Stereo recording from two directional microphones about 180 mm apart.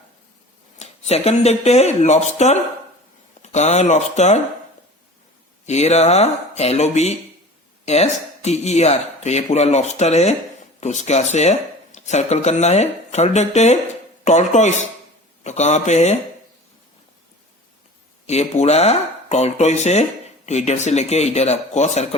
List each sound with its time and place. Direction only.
0.8 s speech: 35° left (ahead or behind)
5.6 s speech: 40° left (ahead or behind)
18.3 s speech: 35° left (ahead or behind)